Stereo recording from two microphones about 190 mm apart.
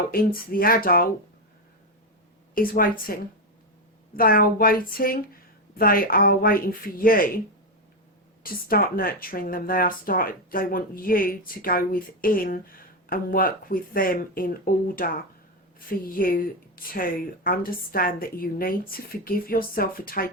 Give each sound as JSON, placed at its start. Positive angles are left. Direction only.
{"t": 0.1, "sound": "speech", "side_deg": 50}
{"t": 2.6, "sound": "speech", "side_deg": 50}
{"t": 4.1, "sound": "speech", "side_deg": 50}
{"t": 8.4, "sound": "speech", "side_deg": 50}